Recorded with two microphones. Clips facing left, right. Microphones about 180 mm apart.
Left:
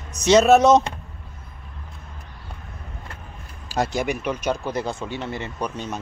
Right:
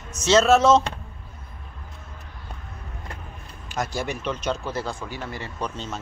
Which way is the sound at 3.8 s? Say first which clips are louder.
Left 5 dB; 20° left (ahead or behind).